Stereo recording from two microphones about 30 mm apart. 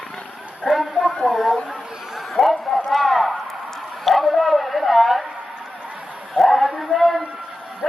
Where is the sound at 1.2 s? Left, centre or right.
Centre.